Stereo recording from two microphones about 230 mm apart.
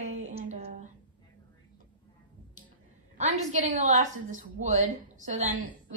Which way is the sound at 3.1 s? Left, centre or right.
Right.